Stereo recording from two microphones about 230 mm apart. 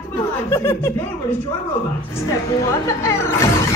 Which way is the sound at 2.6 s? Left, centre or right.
Centre.